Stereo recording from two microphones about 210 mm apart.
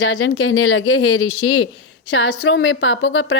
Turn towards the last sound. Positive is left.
turn(degrees=60)  # may be behind; listen again after turning